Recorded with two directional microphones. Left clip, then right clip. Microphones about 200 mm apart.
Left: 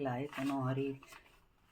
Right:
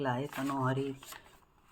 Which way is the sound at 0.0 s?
40° right (ahead or behind).